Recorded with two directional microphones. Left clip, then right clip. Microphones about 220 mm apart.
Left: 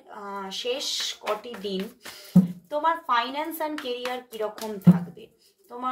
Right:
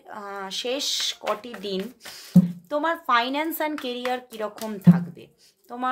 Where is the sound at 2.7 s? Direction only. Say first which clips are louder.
Right 1 dB; 50° right (ahead or behind).